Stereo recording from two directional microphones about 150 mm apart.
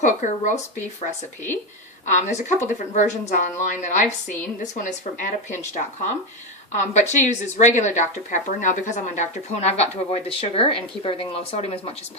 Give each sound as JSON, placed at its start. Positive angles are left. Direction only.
{"t": 0.0, "sound": "speech", "side_deg": 55}
{"t": 2.1, "sound": "a woman's voice", "side_deg": 55}
{"t": 6.9, "sound": "a woman's voice", "side_deg": 50}